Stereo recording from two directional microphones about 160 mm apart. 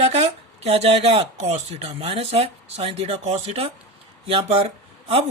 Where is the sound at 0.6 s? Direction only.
40° right (ahead or behind).